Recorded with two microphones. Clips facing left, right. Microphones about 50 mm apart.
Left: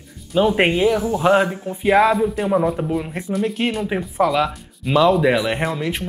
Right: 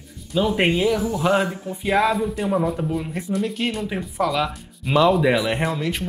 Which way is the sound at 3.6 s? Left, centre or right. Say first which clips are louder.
Left 3 dB; left.